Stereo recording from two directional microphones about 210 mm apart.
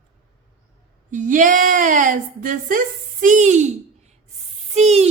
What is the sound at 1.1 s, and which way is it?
A woman's voice, 35° right (ahead or behind).